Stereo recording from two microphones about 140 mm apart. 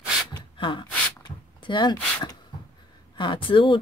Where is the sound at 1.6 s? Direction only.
35° left (ahead or behind).